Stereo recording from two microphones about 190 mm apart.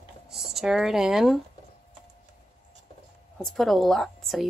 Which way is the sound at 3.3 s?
Centre (ahead or behind).